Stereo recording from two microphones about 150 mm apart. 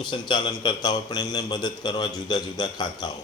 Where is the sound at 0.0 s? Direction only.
30° left (ahead or behind).